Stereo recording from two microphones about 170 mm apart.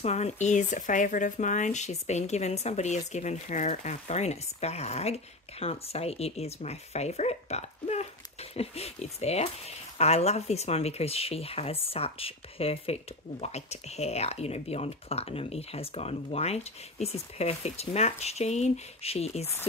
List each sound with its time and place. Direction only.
0.0 s speech: 40° left (ahead or behind)